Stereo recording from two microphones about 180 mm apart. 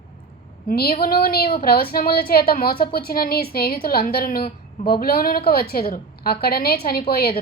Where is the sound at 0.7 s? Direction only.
55° left (ahead or behind).